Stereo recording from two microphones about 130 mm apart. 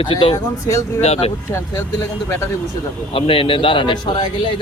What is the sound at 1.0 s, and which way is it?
Speech, 55° left (ahead or behind).